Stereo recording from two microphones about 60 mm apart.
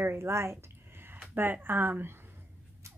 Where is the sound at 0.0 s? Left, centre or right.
Right.